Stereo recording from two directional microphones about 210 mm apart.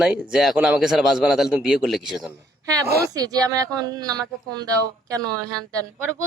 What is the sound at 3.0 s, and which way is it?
A woman's voice, 15° right (ahead or behind).